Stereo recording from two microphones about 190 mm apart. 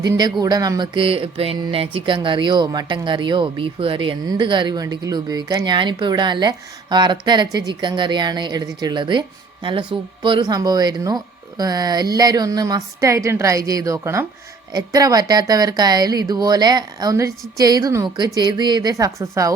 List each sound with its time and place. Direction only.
0.0 s mantra: 20° right (ahead or behind)